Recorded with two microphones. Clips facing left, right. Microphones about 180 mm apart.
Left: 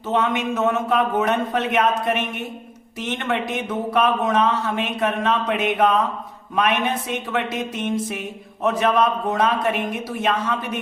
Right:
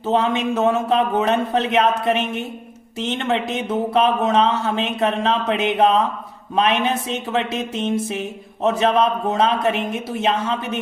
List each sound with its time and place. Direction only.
0.1 s speech: 30° right (ahead or behind)